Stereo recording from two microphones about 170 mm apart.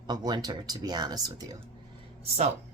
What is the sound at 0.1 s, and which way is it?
Speech, 25° right (ahead or behind).